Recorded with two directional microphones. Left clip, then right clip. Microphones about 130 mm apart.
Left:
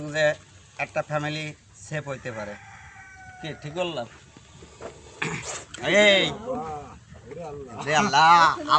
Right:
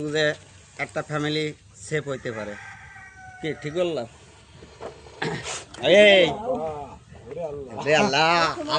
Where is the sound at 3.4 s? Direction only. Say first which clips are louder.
Right 4 dB; 50° left (ahead or behind).